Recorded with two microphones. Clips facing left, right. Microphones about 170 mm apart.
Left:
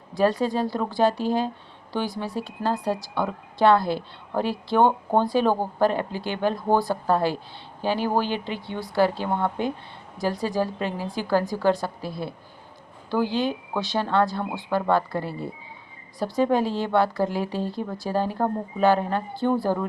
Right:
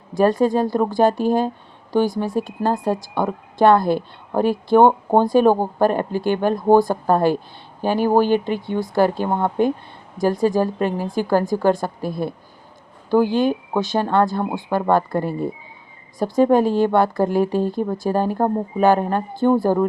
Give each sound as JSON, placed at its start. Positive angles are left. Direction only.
{"t": 0.1, "sound": "a woman's voice", "side_deg": -45}